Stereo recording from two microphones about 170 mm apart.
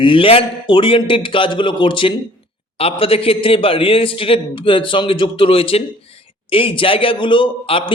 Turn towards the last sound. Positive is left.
turn(degrees=30)  # may be behind; listen again after turning